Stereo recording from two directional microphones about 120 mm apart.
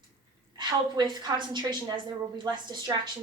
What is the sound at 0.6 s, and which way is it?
A woman's voice, 35° right (ahead or behind).